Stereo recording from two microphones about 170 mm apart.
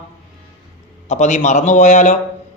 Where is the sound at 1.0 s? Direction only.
45° left (ahead or behind).